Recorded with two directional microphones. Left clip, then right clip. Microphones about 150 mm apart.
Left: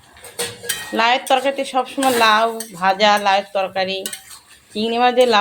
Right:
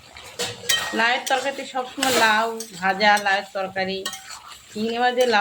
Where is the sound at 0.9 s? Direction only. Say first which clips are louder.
Left 8 dB; 35° left (ahead or behind).